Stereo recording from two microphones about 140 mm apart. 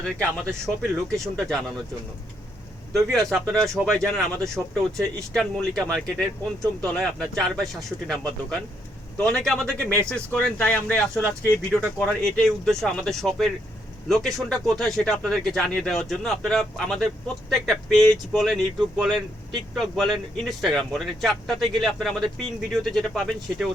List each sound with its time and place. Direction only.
0.0 s speech: 5° left (ahead or behind)
2.9 s speech: 5° left (ahead or behind)
9.6 s speech: 20° right (ahead or behind)
10.1 s speech: 5° left (ahead or behind)